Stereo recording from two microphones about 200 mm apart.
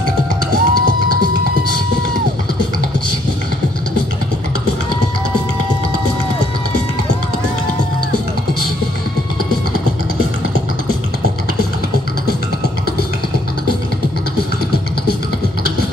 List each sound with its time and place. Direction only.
0.5 s music: 45° right (ahead or behind)